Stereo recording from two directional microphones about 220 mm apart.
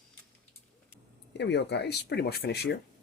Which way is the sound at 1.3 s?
50° left (ahead or behind).